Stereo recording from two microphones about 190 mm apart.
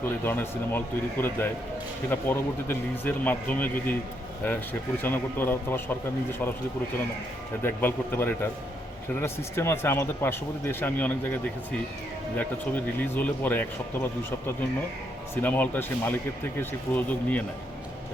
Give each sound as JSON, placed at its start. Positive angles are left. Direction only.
{"t": 0.0, "sound": "speech", "side_deg": 10}
{"t": 5.0, "sound": "speech", "side_deg": 10}
{"t": 7.6, "sound": "speech", "side_deg": 10}
{"t": 12.4, "sound": "speech", "side_deg": 10}